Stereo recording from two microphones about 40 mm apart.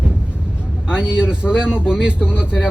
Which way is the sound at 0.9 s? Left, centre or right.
Right.